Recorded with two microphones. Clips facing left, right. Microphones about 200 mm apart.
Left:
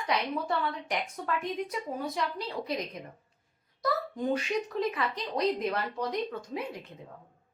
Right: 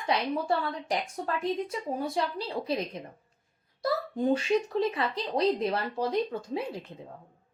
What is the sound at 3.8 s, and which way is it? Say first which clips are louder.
Speech: right 3 dB; 30° right (ahead or behind).